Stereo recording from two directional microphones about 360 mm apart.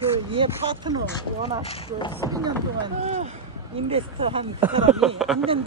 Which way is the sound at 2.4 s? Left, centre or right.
Centre.